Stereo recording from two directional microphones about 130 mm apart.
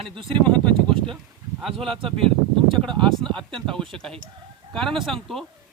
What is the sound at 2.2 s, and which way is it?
Speech, 45° right (ahead or behind).